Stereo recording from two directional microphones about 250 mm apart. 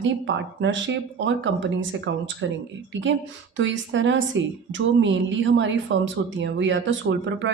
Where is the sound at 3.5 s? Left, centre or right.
Right.